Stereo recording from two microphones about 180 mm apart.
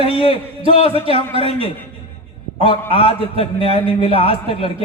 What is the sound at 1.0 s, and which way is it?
Speech, 30° right (ahead or behind).